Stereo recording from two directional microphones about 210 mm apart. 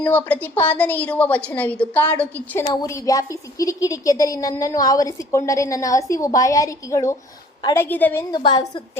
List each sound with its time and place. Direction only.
0.0 s a woman's voice: 5° left (ahead or behind)
8.3 s a woman's voice: 20° left (ahead or behind)